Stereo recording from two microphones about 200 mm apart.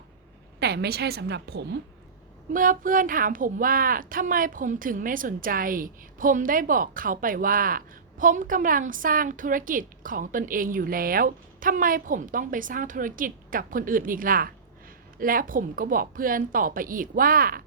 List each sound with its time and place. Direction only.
0.6 s speech: 55° right (ahead or behind)
2.5 s speech: 45° right (ahead or behind)